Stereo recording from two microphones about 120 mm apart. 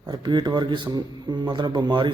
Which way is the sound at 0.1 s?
35° right (ahead or behind).